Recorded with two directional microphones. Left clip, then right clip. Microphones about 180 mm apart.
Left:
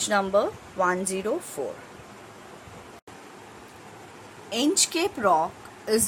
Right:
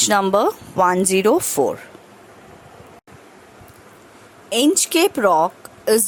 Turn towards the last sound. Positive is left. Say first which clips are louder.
# right 8 dB
turn(degrees=-50)  # may be behind; listen again after turning